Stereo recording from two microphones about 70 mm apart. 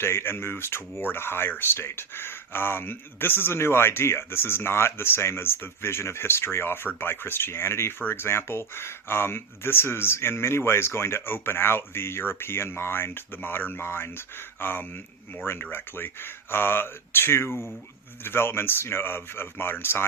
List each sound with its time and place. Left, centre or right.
0.0 s speech: left